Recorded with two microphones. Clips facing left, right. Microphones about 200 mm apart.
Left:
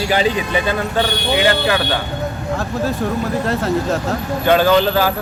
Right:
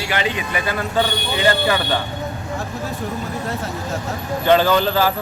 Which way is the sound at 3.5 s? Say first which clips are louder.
Left 8 dB; 90° left.